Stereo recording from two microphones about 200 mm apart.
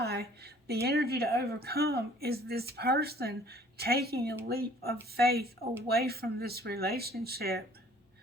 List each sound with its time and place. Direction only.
0.0 s speech: 55° right (ahead or behind)